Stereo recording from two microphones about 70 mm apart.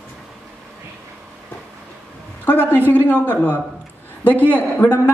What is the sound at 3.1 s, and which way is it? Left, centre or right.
Speech, centre.